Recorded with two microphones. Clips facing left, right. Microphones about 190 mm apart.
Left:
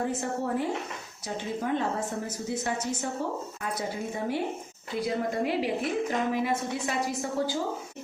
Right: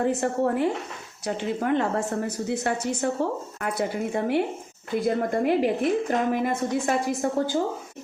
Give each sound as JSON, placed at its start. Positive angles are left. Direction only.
{"t": 0.0, "sound": "a woman's voice", "side_deg": -70}
{"t": 4.9, "sound": "a woman's voice", "side_deg": -50}